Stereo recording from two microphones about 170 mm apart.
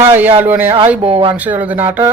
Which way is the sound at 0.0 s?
10° right (ahead or behind).